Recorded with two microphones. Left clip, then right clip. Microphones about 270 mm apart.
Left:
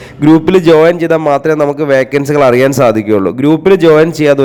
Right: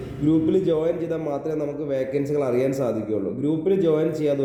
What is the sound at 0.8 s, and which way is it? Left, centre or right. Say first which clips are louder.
A man's voice: left 16 dB; left.